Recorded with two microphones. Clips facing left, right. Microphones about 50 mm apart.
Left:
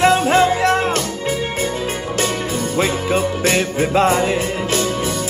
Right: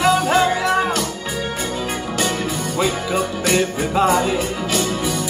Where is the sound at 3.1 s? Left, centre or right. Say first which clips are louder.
Left 2 dB; left.